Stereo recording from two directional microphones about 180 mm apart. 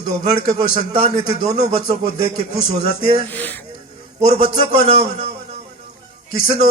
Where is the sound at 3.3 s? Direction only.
10° left (ahead or behind).